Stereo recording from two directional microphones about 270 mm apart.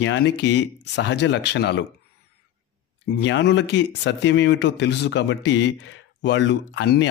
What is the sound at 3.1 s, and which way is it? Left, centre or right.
Speech, left.